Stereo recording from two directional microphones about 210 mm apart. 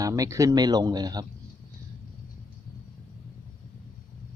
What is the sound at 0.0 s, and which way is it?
Speech, 15° right (ahead or behind).